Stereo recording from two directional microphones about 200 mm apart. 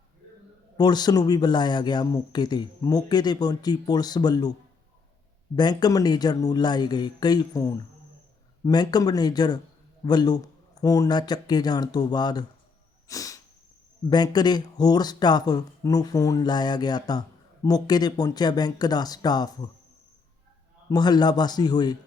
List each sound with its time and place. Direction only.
0.8 s speech: 20° left (ahead or behind)
5.5 s speech: 20° left (ahead or behind)
13.1 s sneeze: 15° left (ahead or behind)
14.1 s speech: 20° left (ahead or behind)
20.9 s speech: 20° left (ahead or behind)